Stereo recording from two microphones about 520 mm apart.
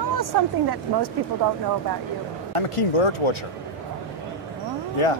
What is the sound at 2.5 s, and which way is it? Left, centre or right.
Speech, left.